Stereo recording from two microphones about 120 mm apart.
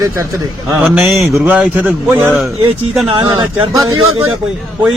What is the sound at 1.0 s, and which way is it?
Speech, centre (ahead or behind).